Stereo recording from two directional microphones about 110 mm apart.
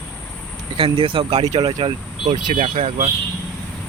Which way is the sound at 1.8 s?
55° right (ahead or behind).